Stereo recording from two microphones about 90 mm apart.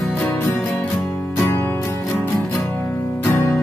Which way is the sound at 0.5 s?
20° left (ahead or behind).